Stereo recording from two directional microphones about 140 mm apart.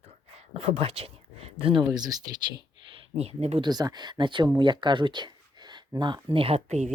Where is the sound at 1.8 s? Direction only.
30° right (ahead or behind).